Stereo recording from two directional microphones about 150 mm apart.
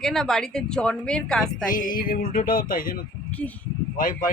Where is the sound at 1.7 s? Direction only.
65° left (ahead or behind).